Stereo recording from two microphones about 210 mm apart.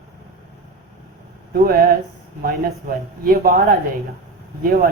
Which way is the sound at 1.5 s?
45° right (ahead or behind).